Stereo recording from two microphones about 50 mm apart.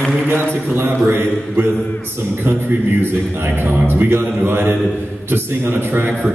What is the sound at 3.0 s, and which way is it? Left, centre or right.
A man's voice, right.